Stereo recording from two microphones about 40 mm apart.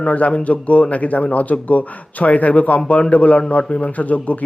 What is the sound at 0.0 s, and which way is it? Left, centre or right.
Speech, left.